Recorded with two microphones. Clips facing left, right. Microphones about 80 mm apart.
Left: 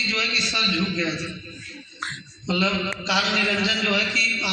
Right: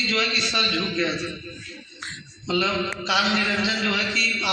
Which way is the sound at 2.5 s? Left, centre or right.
Right.